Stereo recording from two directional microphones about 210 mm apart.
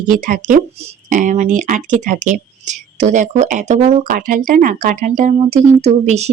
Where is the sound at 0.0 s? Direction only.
40° right (ahead or behind).